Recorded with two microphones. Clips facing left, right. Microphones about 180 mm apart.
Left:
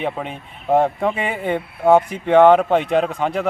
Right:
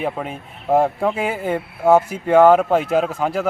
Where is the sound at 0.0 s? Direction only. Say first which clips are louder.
Even; 5° right (ahead or behind).